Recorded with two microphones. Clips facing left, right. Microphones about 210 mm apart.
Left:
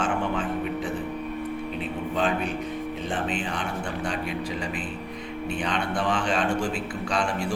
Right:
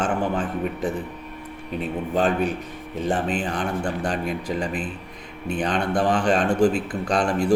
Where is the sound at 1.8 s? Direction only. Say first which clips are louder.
Right 6 dB; 45° right (ahead or behind).